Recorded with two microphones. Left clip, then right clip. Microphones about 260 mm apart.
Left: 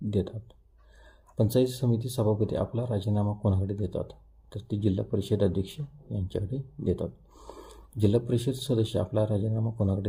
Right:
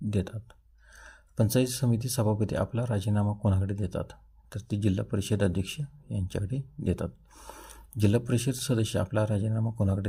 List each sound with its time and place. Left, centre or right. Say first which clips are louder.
0.2 s speech: left 4 dB; right